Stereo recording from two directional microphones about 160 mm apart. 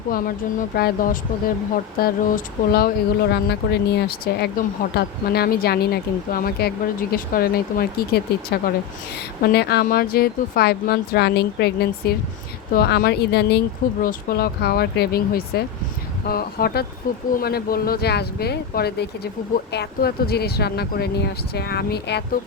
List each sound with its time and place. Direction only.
0.1 s speech: 65° left (ahead or behind)
9.4 s speech: 90° left
12.7 s speech: 70° left (ahead or behind); by 13.6 s 90° left
14.0 s speech: 65° left (ahead or behind); by 22.2 s 90° left